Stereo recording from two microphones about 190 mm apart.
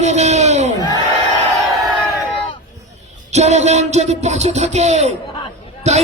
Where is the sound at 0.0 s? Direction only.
35° right (ahead or behind).